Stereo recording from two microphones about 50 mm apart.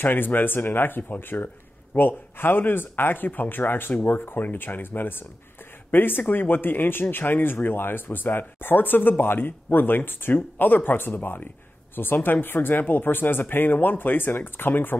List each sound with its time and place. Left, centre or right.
0.0 s speech: left